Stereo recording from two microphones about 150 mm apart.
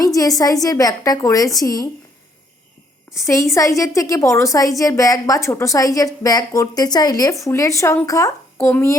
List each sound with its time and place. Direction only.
0.0 s a woman's voice: 25° left (ahead or behind)
3.1 s a woman's voice: 20° left (ahead or behind)